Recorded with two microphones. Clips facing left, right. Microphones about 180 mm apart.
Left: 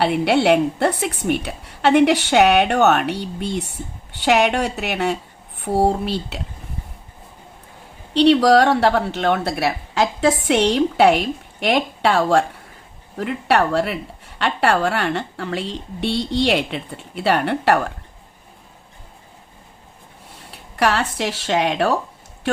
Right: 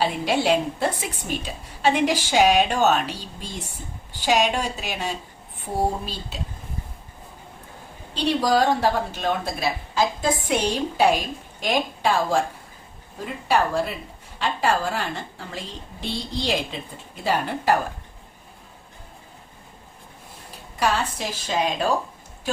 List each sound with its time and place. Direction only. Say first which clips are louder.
0.0 s a woman's voice: left 6 dB; 65° left (ahead or behind)
8.1 s a woman's voice: left 8 dB; 70° left (ahead or behind)
20.5 s speech: left 4 dB; 70° left (ahead or behind)